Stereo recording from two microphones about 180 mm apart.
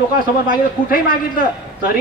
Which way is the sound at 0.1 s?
50° left (ahead or behind).